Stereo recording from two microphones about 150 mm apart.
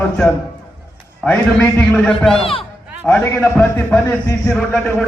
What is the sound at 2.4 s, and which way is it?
Speech, 40° left (ahead or behind).